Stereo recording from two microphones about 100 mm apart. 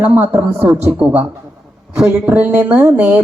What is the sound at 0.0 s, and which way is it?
Speech, 15° right (ahead or behind).